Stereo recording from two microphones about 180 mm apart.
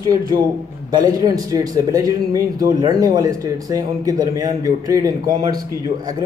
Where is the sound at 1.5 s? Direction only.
20° right (ahead or behind).